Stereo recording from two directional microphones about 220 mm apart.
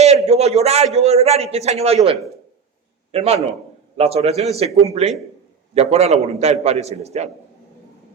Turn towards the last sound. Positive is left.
turn(degrees=-30)  # may be behind; listen again after turning